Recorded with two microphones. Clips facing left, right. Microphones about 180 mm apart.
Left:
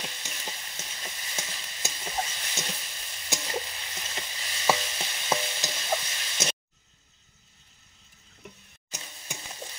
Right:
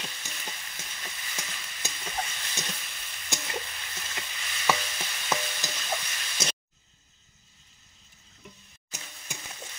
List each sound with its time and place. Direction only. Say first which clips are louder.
0.5 s stir: left 3 dB; 25° left (ahead or behind)
1.9 s sizzle: left 2 dB; 25° left (ahead or behind)
4.9 s stir: left 2 dB; 25° left (ahead or behind)
9.2 s a sound: left 3 dB; 30° left (ahead or behind)